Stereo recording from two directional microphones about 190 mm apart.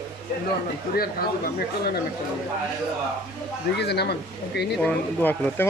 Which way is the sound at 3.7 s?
60° left (ahead or behind).